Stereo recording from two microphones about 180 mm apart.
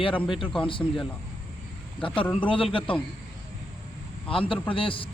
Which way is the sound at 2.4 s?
30° left (ahead or behind).